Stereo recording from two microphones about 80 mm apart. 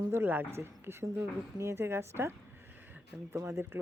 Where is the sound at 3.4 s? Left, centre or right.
Right.